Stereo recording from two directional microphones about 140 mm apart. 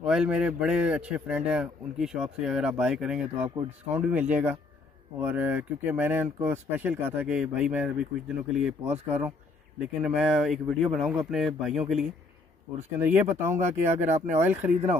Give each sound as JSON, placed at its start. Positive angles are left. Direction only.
{"t": 0.0, "sound": "a man's voice", "side_deg": -5}